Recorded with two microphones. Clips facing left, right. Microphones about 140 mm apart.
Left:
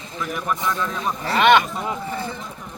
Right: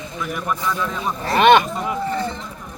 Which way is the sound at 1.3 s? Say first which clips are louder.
Right 3 dB; 30° right (ahead or behind).